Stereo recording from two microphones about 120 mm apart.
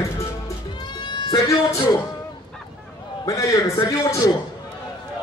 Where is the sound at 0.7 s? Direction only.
40° left (ahead or behind).